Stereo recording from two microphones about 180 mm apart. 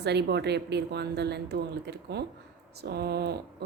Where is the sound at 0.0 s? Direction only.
70° right (ahead or behind).